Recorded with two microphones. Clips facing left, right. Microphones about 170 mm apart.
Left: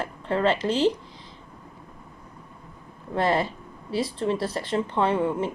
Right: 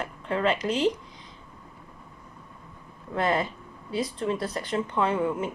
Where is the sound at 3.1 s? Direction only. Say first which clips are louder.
Left 2 dB; 30° left (ahead or behind).